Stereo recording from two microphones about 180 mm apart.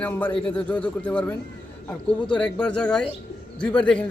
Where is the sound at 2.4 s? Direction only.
5° left (ahead or behind).